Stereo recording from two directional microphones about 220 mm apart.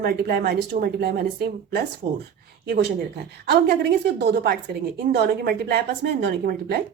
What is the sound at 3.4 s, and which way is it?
Speech, 45° right (ahead or behind).